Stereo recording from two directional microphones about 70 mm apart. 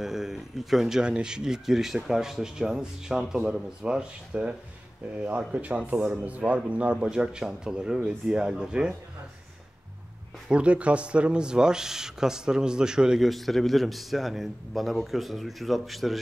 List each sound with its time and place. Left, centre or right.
0.0 s speech: centre
10.5 s speech: centre
13.3 s a man's voice: centre